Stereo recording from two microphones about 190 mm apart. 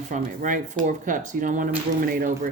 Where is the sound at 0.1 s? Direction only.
45° right (ahead or behind).